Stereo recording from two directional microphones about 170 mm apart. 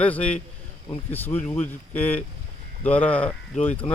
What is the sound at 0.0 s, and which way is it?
Speech, 10° left (ahead or behind).